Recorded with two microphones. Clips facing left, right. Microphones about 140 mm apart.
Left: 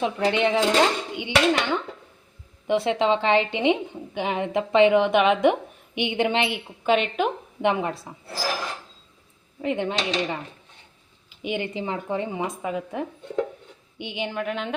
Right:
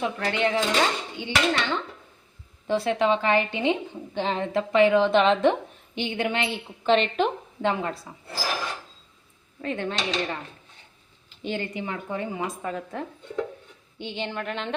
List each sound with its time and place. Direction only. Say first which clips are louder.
0.0 s a woman's voice: left 3 dB; 20° left (ahead or behind)
6.8 s speech: even; 5° left (ahead or behind)
7.6 s a woman's voice: left 3 dB; 20° left (ahead or behind)
9.6 s speech: left 4 dB; 15° left (ahead or behind)
11.7 s a woman's voice: left 3 dB; 25° left (ahead or behind); by 14.8 s 5° left (ahead or behind)